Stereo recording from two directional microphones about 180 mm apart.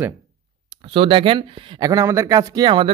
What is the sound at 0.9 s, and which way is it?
Speech, 30° right (ahead or behind).